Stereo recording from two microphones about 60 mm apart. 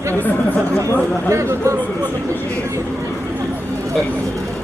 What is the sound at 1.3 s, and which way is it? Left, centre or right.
Speech, right.